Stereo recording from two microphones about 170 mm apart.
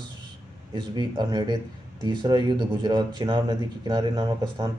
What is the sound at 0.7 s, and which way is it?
Speech, 25° right (ahead or behind).